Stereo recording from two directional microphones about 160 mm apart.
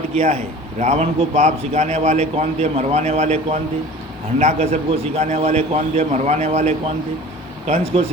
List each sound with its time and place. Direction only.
0.1 s a man's voice: 40° right (ahead or behind)